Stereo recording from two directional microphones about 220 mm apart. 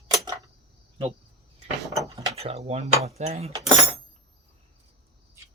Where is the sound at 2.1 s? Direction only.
15° right (ahead or behind).